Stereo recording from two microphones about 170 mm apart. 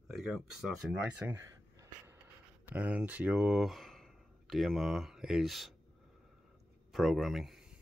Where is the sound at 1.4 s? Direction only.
20° right (ahead or behind).